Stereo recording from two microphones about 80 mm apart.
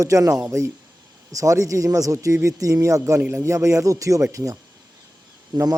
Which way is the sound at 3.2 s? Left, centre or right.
Right.